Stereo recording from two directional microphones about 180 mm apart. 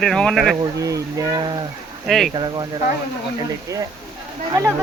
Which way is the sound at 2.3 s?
25° right (ahead or behind).